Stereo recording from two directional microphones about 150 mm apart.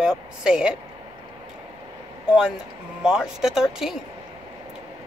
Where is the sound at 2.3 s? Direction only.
5° right (ahead or behind).